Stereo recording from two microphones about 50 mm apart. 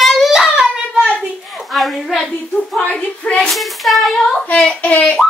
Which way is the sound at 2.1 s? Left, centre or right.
Left.